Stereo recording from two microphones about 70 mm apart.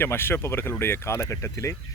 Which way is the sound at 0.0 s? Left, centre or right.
Left.